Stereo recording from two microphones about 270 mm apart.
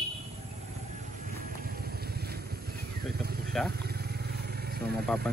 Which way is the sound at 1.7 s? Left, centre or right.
Right.